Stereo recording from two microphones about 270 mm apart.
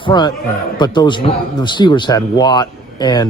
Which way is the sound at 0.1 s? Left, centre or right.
Centre.